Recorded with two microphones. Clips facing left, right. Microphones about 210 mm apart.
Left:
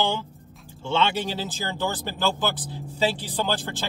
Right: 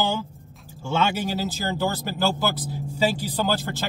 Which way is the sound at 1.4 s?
45° right (ahead or behind).